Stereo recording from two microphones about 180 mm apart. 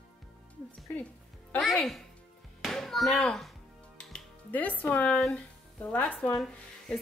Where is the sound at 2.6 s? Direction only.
Centre (ahead or behind).